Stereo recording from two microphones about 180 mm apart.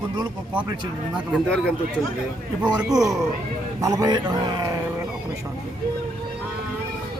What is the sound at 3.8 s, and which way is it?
Speech, 20° right (ahead or behind).